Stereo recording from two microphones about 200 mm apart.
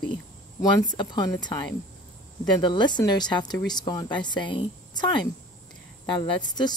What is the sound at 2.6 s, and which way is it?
Speech, 20° left (ahead or behind).